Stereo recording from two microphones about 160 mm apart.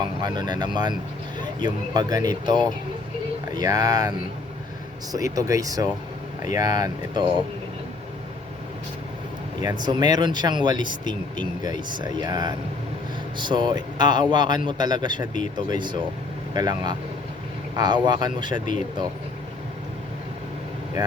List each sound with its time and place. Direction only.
0.2 s speech: 25° right (ahead or behind)
5.1 s speech: 20° right (ahead or behind)
9.8 s speech: 25° right (ahead or behind)
16.6 s speech: 25° right (ahead or behind)
18.5 s speech: 50° left (ahead or behind)